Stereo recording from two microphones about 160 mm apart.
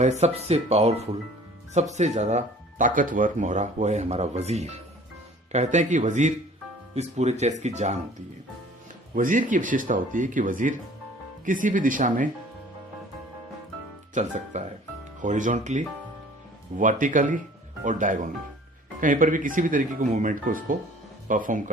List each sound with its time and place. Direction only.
0.0 s speech: 45° right (ahead or behind)
9.1 s speech: 55° right (ahead or behind)
14.1 s speech: 50° right (ahead or behind)